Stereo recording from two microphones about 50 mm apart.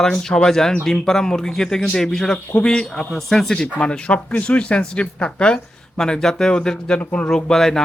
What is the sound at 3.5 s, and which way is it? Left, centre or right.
Speech, left.